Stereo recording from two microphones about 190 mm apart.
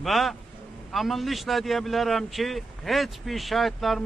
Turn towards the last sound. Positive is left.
turn(degrees=0)  # may be behind; listen again after turning